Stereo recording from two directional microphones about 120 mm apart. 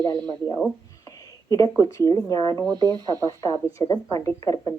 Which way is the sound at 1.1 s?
30° left (ahead or behind).